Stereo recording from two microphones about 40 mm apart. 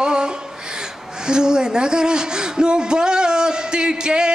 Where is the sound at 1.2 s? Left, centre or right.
Centre.